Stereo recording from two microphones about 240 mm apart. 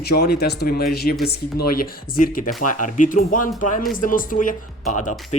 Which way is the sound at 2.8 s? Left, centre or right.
Left.